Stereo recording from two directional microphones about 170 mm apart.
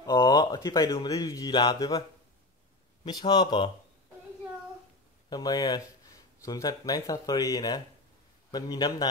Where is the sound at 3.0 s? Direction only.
25° left (ahead or behind).